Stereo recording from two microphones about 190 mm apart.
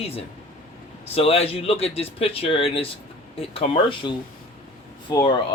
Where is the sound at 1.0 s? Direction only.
30° left (ahead or behind).